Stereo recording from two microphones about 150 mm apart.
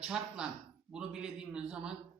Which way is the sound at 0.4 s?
5° right (ahead or behind).